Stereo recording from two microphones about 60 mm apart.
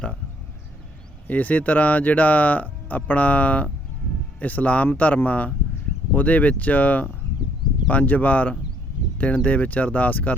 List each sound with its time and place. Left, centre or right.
1.3 s speech: left